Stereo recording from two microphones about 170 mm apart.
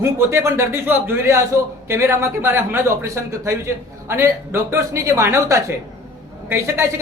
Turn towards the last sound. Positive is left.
turn(degrees=-15)  # may be behind; listen again after turning